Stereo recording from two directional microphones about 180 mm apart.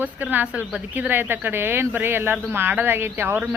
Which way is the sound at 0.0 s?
10° right (ahead or behind).